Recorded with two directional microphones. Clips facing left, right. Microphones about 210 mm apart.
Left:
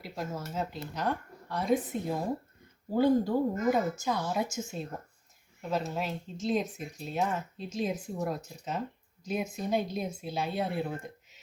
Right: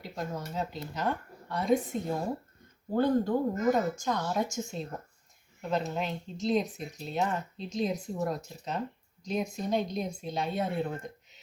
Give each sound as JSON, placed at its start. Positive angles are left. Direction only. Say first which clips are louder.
{"t": 0.0, "sound": "speech", "louder": "right 1 dB", "side_deg": 5}